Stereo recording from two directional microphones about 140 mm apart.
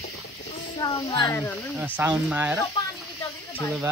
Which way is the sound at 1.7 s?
10° right (ahead or behind).